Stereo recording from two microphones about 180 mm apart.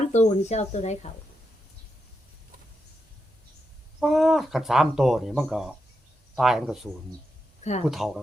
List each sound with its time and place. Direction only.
0.0 s speech: 40° left (ahead or behind)
4.0 s speech: centre (ahead or behind)
7.6 s speech: 40° left (ahead or behind)
7.9 s speech: centre (ahead or behind)